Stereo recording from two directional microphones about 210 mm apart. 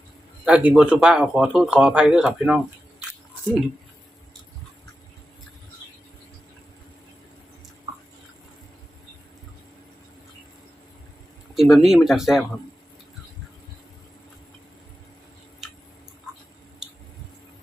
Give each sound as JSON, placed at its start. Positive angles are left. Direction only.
{"t": 0.4, "sound": "speech", "side_deg": -5}
{"t": 11.5, "sound": "speech", "side_deg": 0}